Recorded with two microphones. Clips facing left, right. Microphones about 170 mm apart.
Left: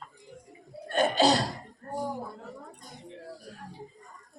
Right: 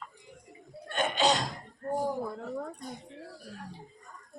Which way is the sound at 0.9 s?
35° left (ahead or behind).